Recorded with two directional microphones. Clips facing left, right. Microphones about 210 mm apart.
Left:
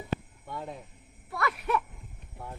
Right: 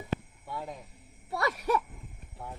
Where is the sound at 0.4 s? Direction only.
5° right (ahead or behind).